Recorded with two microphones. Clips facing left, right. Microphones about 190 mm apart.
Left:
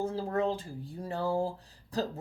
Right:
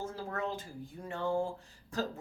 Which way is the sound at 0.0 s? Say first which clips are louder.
Left 7 dB; 30° left (ahead or behind).